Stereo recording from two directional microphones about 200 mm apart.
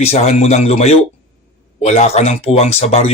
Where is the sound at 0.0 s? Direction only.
30° left (ahead or behind).